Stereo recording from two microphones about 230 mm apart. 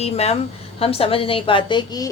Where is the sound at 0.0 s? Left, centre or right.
Left.